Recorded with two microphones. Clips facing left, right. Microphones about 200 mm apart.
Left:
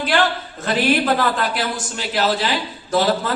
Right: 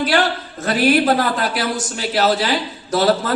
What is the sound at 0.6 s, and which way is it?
A man's voice, 45° right (ahead or behind).